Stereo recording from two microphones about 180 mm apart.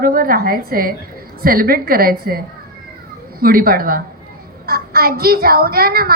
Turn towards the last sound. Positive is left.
turn(degrees=-55)  # may be behind; listen again after turning